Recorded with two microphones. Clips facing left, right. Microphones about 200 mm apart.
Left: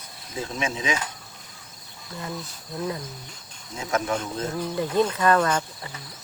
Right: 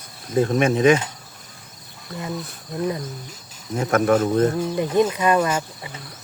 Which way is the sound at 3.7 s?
55° right (ahead or behind).